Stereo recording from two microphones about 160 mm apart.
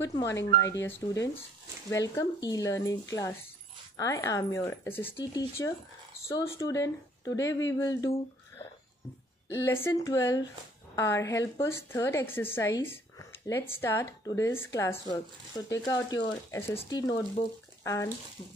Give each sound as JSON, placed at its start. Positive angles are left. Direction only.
{"t": 0.0, "sound": "speech", "side_deg": 20}
{"t": 5.1, "sound": "speech", "side_deg": 25}
{"t": 9.7, "sound": "speech", "side_deg": 15}